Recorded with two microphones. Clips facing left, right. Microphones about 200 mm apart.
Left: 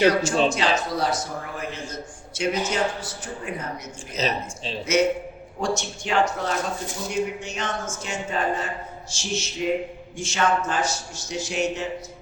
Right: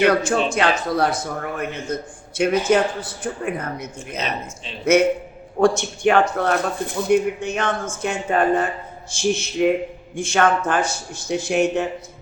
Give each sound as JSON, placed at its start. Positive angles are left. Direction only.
{"t": 0.5, "sound": "speech", "side_deg": -55}